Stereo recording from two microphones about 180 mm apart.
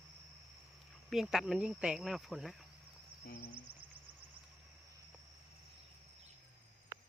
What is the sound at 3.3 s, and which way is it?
Speech, 50° left (ahead or behind).